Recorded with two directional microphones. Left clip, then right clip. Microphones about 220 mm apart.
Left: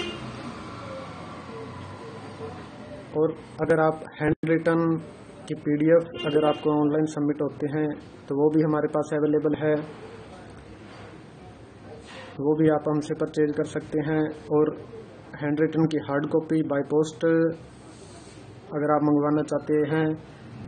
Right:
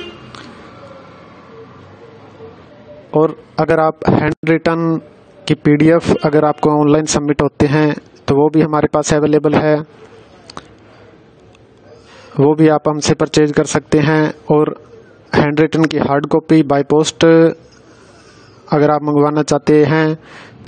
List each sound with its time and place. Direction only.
3.2 s speech: 50° right (ahead or behind)
12.4 s speech: 50° right (ahead or behind)
18.7 s speech: 50° right (ahead or behind)